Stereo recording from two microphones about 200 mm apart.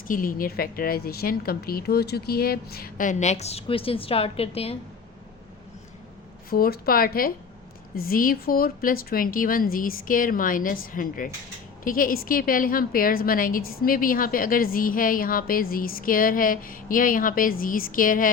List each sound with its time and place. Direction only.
0.1 s a woman's voice: 45° left (ahead or behind)
6.5 s a woman's voice: 50° left (ahead or behind)